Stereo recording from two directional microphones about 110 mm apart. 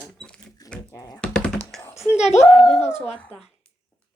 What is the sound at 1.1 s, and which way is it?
Typing, 10° left (ahead or behind).